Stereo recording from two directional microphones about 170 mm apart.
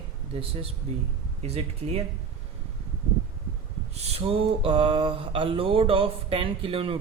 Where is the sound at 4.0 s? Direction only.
35° right (ahead or behind).